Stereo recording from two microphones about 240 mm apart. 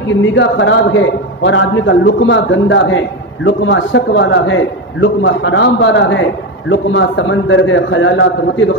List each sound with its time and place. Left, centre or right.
0.1 s a man's voice: left